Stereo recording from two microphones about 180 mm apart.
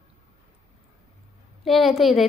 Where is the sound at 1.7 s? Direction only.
Centre (ahead or behind).